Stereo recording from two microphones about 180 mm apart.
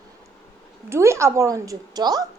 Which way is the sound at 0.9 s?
15° right (ahead or behind).